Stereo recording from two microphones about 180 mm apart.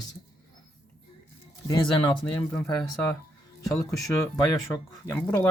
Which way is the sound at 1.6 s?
20° left (ahead or behind).